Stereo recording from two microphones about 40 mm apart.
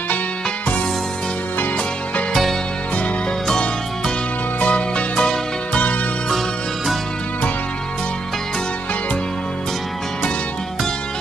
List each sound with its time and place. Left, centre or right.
4.6 s music: left